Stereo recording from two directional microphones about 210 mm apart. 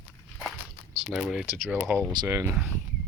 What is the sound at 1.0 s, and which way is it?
Speech, centre (ahead or behind).